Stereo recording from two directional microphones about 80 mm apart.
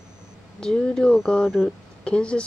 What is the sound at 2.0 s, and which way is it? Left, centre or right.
Speech, centre.